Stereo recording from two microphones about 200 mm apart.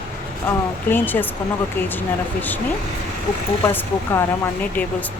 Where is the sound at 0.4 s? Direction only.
10° left (ahead or behind).